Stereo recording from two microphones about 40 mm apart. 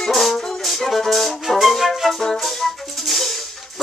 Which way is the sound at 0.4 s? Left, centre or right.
Centre.